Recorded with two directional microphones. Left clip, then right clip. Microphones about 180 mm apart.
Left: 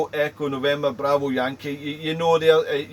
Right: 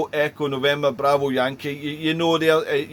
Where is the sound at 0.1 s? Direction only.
55° right (ahead or behind).